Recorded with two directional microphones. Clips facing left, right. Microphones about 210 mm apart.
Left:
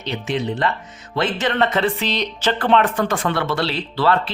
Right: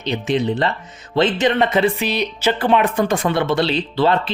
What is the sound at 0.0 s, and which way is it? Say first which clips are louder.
Speech: right 4 dB; 20° right (ahead or behind).